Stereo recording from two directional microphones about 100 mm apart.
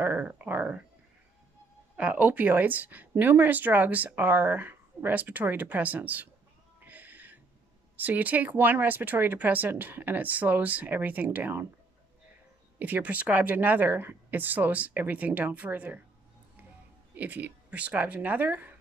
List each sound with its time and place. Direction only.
0.0 s a sound: 20° right (ahead or behind)
2.0 s speech: 15° right (ahead or behind)
6.8 s a sound: 20° right (ahead or behind)
7.9 s speech: 15° right (ahead or behind)
12.7 s speech: 15° right (ahead or behind)
17.1 s speech: 15° right (ahead or behind)